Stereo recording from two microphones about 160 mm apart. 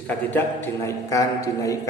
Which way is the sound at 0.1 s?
10° left (ahead or behind).